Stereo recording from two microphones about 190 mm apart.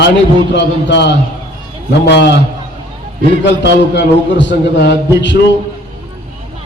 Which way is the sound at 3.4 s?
65° left (ahead or behind).